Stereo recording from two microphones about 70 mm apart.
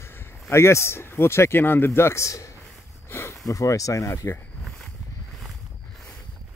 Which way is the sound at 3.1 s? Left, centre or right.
Left.